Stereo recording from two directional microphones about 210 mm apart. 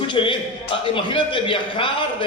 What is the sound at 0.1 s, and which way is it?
A man's voice, 25° left (ahead or behind).